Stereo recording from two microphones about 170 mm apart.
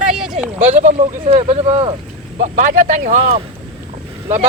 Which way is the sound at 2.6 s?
55° right (ahead or behind).